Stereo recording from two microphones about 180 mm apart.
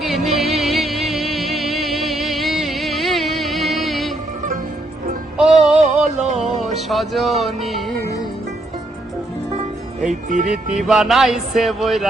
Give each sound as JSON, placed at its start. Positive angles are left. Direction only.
{"t": 0.0, "sound": "music", "side_deg": 0}
{"t": 5.4, "sound": "music", "side_deg": -5}
{"t": 6.1, "sound": "music", "side_deg": -40}
{"t": 6.7, "sound": "music", "side_deg": 0}
{"t": 10.1, "sound": "speech", "side_deg": -45}
{"t": 10.8, "sound": "music", "side_deg": 0}